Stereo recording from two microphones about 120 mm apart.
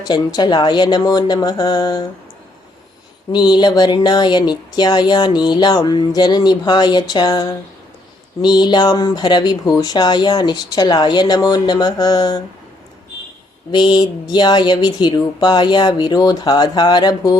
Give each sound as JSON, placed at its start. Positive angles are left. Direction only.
{"t": 0.0, "sound": "speech", "side_deg": 35}
{"t": 3.3, "sound": "speech", "side_deg": 40}
{"t": 13.7, "sound": "speech", "side_deg": 35}